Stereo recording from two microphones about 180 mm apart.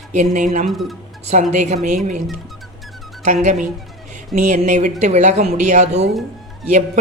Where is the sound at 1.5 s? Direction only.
45° right (ahead or behind).